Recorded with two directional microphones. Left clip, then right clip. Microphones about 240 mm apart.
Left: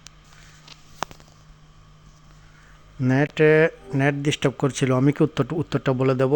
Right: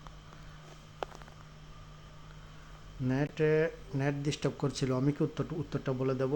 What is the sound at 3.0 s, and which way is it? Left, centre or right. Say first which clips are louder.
Speech: left 12 dB; left.